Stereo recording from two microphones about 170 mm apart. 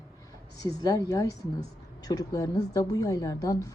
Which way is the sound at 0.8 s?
20° left (ahead or behind).